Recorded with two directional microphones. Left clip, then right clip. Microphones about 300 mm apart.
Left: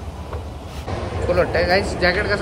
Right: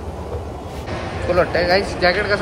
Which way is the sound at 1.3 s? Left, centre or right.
Centre.